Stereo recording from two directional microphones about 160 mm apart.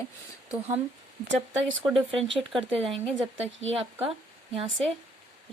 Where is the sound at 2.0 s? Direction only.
35° right (ahead or behind).